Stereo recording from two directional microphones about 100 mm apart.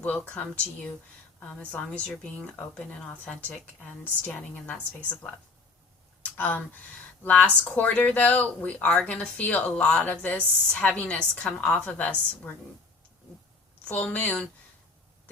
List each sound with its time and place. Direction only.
0.0 s speech: 15° left (ahead or behind)
4.0 s speech: 15° left (ahead or behind)
6.2 s a sound: 15° left (ahead or behind)
7.2 s speech: 15° left (ahead or behind)
13.8 s speech: 15° left (ahead or behind)